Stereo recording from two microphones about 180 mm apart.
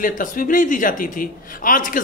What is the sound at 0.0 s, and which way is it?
A man's voice, 50° left (ahead or behind).